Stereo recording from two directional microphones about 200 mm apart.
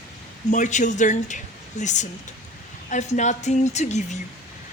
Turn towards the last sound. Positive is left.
turn(degrees=35)  # may be behind; listen again after turning